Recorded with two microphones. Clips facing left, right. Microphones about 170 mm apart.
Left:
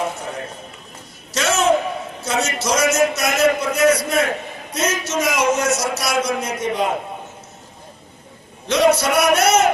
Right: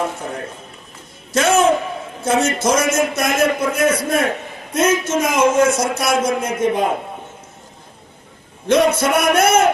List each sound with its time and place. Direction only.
1.3 s a sound: 55° right (ahead or behind)
2.2 s a man's voice: 55° right (ahead or behind)
8.6 s a man's voice: 50° right (ahead or behind)